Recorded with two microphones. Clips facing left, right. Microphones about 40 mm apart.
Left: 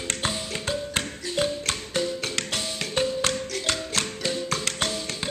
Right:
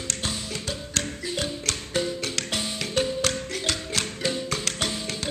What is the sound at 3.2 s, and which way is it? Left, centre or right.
Music, centre.